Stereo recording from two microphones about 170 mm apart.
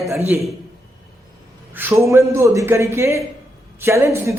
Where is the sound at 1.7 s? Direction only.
10° right (ahead or behind).